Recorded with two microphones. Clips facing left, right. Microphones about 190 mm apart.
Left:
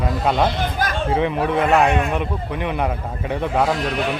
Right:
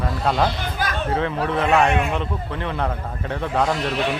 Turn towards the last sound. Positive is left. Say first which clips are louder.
# left 2 dB
turn(degrees=0)  # may be behind; listen again after turning